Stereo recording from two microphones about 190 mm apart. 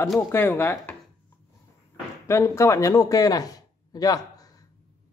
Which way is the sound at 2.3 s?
15° left (ahead or behind).